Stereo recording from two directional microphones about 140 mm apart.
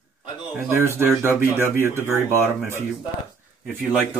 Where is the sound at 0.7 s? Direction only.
15° right (ahead or behind).